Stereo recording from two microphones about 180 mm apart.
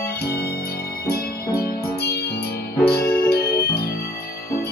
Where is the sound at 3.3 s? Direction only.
60° left (ahead or behind).